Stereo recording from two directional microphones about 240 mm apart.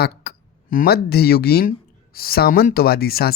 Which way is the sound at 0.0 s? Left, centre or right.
Left.